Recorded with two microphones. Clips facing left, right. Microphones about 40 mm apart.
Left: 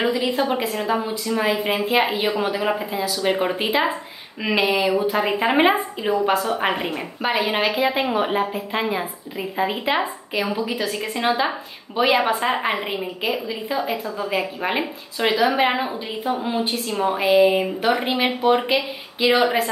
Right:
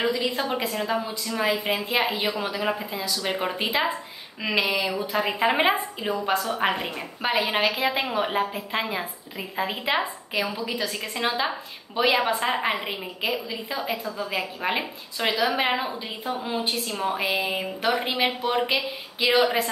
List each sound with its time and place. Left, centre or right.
0.0 s a woman's voice: centre
17.2 s a woman's voice: centre